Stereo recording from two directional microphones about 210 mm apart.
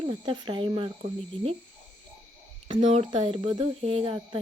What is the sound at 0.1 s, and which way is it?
Speech, 25° right (ahead or behind).